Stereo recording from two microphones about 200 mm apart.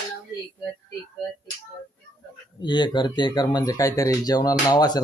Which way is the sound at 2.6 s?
20° left (ahead or behind).